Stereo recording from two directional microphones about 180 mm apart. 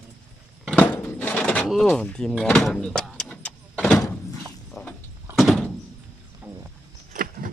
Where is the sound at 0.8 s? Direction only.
10° left (ahead or behind).